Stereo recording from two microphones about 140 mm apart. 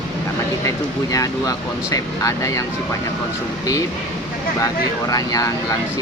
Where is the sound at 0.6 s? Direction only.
25° left (ahead or behind).